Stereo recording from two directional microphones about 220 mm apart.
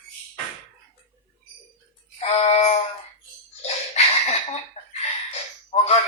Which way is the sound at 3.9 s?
30° left (ahead or behind).